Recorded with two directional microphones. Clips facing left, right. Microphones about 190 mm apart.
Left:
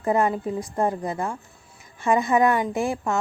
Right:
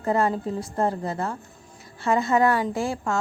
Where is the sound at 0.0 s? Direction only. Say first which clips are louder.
Left 1 dB; 15° left (ahead or behind).